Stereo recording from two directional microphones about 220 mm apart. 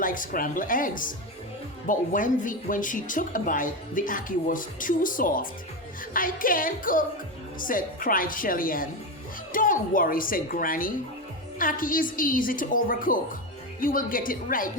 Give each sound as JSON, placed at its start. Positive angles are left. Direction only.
{"t": 0.0, "sound": "speech", "side_deg": 40}